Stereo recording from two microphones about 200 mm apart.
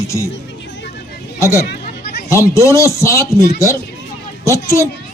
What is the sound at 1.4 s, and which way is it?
Speech, 15° left (ahead or behind).